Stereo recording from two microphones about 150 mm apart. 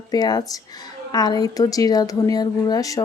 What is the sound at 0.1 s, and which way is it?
Speech, 25° left (ahead or behind).